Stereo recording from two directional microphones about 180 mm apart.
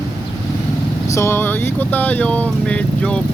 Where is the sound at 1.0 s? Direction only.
15° left (ahead or behind).